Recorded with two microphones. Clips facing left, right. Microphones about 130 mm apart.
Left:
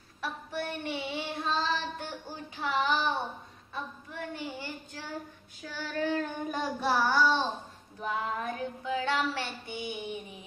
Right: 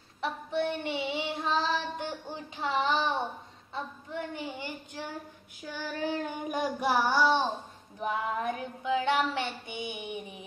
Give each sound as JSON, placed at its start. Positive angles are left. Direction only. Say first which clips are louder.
{"t": 0.2, "sound": "child singing", "louder": "right 5 dB", "side_deg": -20}
{"t": 8.0, "sound": "female singing", "louder": "right 2 dB", "side_deg": -20}
{"t": 9.3, "sound": "child singing", "louder": "right 2 dB", "side_deg": -20}